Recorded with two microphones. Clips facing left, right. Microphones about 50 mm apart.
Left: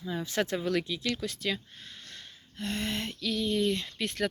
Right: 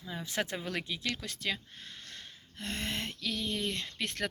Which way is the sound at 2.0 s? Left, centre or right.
Right.